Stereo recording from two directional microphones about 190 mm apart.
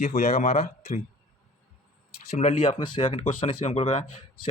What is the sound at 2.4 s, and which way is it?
Speech, 35° left (ahead or behind).